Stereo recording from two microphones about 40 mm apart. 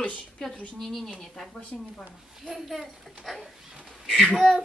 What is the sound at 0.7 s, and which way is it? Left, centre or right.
A child's voice, centre.